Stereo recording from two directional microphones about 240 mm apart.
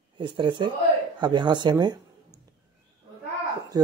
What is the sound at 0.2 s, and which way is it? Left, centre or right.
Speech, centre.